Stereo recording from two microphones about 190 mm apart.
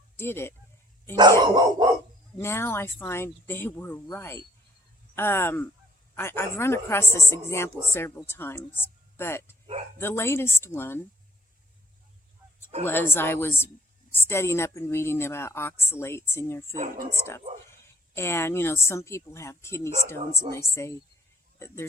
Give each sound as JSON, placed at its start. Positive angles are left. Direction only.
{"t": 0.2, "sound": "a woman's voice", "side_deg": 10}
{"t": 1.1, "sound": "speech", "side_deg": -20}
{"t": 2.4, "sound": "a woman's voice", "side_deg": 15}
{"t": 12.8, "sound": "a woman's voice", "side_deg": 10}
{"t": 16.7, "sound": "speech", "side_deg": -40}
{"t": 17.2, "sound": "a woman's voice", "side_deg": 15}